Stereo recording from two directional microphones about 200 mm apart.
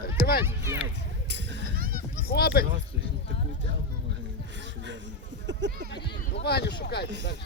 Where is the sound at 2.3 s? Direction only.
50° left (ahead or behind).